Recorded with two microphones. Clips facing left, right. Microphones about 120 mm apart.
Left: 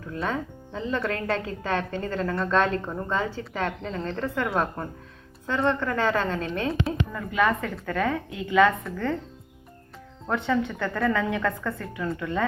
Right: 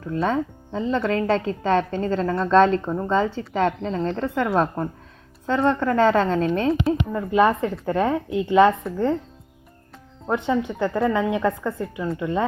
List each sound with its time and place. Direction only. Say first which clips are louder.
0.1 s a woman's voice: right 7 dB; 30° right (ahead or behind)
10.2 s speech: right 3 dB; 20° right (ahead or behind)